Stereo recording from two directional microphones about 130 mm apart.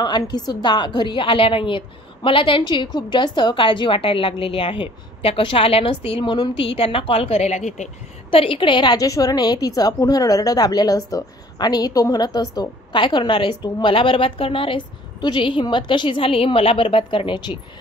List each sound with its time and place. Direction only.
0.0 s a woman's voice: 30° left (ahead or behind)